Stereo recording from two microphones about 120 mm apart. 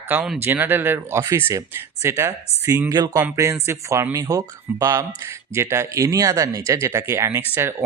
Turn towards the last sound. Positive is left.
turn(degrees=-20)  # may be behind; listen again after turning